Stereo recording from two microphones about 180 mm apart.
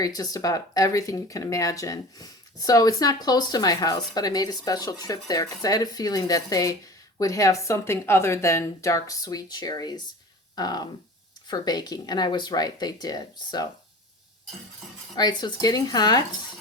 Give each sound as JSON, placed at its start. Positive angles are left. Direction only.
{"t": 0.0, "sound": "a woman's voice", "side_deg": 20}
{"t": 15.1, "sound": "speech", "side_deg": 25}